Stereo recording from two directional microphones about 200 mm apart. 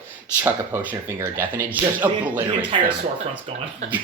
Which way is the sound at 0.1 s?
10° right (ahead or behind).